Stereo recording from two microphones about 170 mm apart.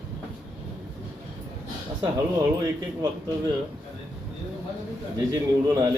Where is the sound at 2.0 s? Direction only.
20° right (ahead or behind).